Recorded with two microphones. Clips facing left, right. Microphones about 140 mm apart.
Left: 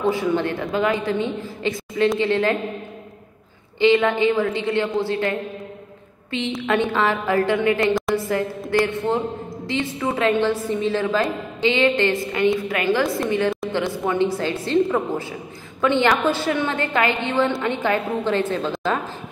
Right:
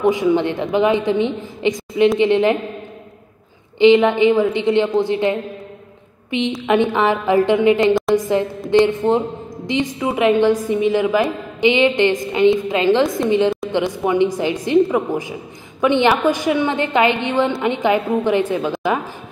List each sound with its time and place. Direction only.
0.0 s a woman's voice: 15° right (ahead or behind)
3.8 s a woman's voice: 20° right (ahead or behind)
6.6 s a woman's voice: 15° right (ahead or behind)